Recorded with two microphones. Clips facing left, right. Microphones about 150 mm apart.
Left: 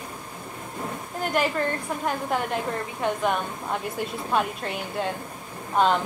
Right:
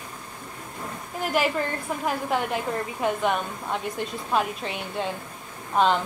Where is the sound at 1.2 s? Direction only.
5° right (ahead or behind).